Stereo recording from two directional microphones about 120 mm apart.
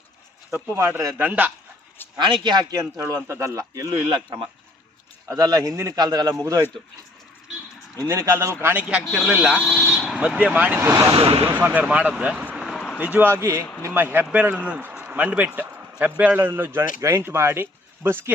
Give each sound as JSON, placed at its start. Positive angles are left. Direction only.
{"t": 0.5, "sound": "speech", "side_deg": -20}
{"t": 2.1, "sound": "speech", "side_deg": -40}
{"t": 3.2, "sound": "speech", "side_deg": -25}
{"t": 4.1, "sound": "speech", "side_deg": -45}
{"t": 5.3, "sound": "speech", "side_deg": -30}
{"t": 7.9, "sound": "speech", "side_deg": -25}
{"t": 8.6, "sound": "speech", "side_deg": -10}
{"t": 9.6, "sound": "speech", "side_deg": 5}
{"t": 11.1, "sound": "speech", "side_deg": -50}
{"t": 11.4, "sound": "speech", "side_deg": -15}
{"t": 12.5, "sound": "a sound", "side_deg": 0}
{"t": 13.0, "sound": "a man's voice", "side_deg": -15}